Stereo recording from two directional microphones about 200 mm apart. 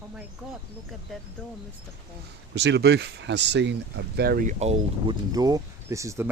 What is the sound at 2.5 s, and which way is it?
Speech, 60° right (ahead or behind).